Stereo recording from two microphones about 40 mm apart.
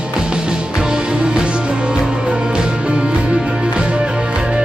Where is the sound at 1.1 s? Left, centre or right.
Right.